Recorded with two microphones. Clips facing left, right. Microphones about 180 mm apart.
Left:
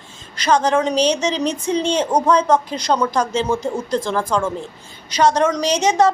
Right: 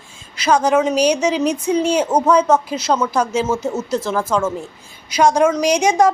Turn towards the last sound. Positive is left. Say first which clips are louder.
# right 2 dB
turn(degrees=-10)  # may be behind; listen again after turning